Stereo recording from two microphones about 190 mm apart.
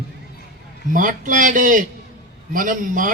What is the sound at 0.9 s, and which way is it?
A man's voice, 45° right (ahead or behind).